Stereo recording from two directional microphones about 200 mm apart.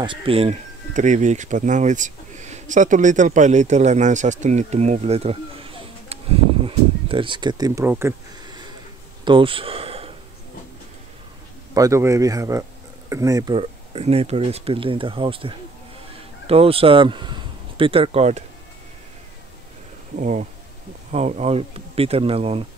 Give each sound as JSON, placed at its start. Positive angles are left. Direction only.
{"t": 0.0, "sound": "speech", "side_deg": -25}
{"t": 9.2, "sound": "a sound", "side_deg": -25}
{"t": 11.7, "sound": "speech", "side_deg": -15}
{"t": 20.2, "sound": "speech", "side_deg": -35}